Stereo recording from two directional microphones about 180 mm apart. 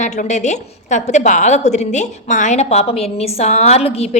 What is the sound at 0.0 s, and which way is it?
A woman's voice, 40° left (ahead or behind).